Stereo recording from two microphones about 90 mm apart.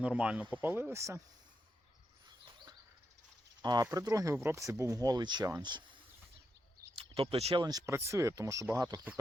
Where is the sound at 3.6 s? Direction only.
50° right (ahead or behind).